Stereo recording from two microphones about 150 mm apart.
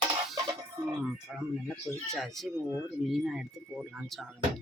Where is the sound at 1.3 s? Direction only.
5° right (ahead or behind).